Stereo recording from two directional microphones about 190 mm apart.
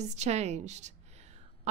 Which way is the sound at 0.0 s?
35° right (ahead or behind).